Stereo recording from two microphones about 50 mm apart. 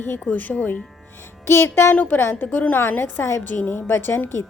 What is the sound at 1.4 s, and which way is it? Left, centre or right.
Speech, left.